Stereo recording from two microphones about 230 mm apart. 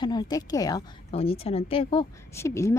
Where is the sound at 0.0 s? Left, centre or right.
Centre.